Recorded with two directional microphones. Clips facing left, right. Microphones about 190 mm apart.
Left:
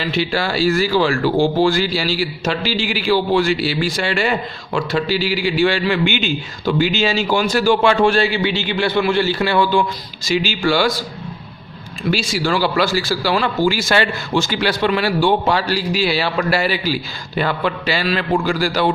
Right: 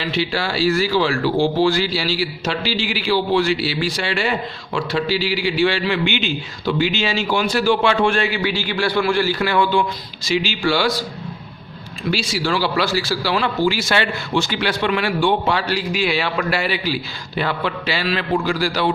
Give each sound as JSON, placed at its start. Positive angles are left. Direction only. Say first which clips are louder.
{"t": 0.0, "sound": "a man's voice", "louder": "left 2 dB", "side_deg": 45}
{"t": 10.2, "sound": "a man's voice", "louder": "left 2 dB", "side_deg": 45}
{"t": 12.1, "sound": "a man's voice", "louder": "left 2 dB", "side_deg": 45}